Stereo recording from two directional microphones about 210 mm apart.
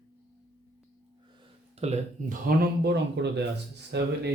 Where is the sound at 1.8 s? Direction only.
35° right (ahead or behind).